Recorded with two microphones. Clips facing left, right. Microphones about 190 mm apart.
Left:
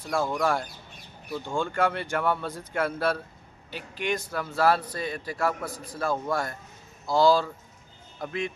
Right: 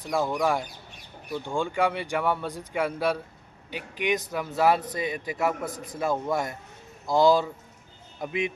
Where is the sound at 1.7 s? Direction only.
15° right (ahead or behind).